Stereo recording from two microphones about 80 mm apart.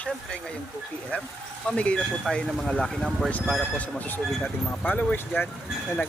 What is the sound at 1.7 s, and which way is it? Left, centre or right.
Speech, centre.